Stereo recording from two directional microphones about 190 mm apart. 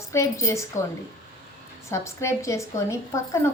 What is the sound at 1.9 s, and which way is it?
A woman's voice, 15° left (ahead or behind).